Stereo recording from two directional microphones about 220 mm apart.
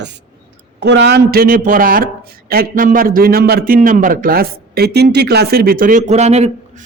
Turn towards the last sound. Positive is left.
turn(degrees=-30)  # may be behind; listen again after turning